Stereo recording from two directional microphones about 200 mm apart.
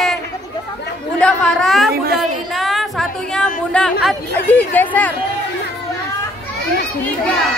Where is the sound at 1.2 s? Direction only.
5° left (ahead or behind).